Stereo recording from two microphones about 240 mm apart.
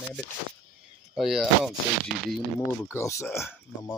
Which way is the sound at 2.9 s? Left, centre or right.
Centre.